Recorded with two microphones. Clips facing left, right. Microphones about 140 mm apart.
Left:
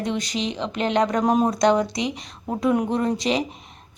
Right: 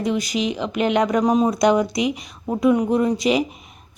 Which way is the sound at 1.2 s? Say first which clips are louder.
Right 1 dB; 5° left (ahead or behind).